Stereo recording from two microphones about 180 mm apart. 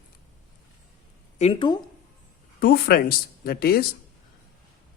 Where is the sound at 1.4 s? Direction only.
30° left (ahead or behind).